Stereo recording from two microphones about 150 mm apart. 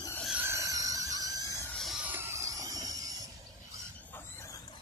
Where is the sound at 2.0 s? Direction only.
15° right (ahead or behind).